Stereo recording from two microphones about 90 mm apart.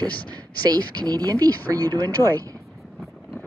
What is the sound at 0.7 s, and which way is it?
Speech, 45° right (ahead or behind).